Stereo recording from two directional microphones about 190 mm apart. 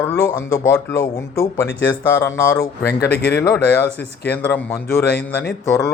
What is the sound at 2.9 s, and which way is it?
Speech, 55° left (ahead or behind).